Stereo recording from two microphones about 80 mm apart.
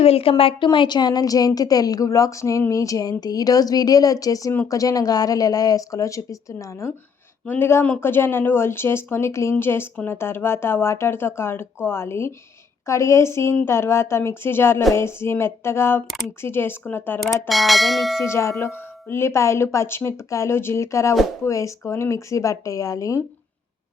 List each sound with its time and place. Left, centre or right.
0.6 s a woman's voice: left
7.4 s speech: left
16.0 s church bell: centre
16.4 s speech: left
17.5 s church bell: centre
18.3 s speech: left